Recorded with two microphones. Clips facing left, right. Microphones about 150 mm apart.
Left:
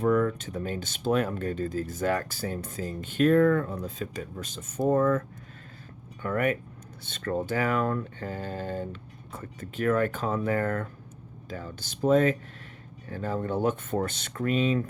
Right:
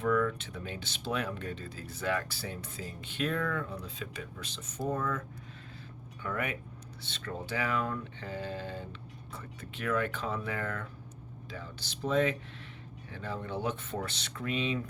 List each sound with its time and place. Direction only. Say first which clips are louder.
0.0 s speech: left 5 dB; 40° left (ahead or behind)
6.2 s speech: left 8 dB; 50° left (ahead or behind)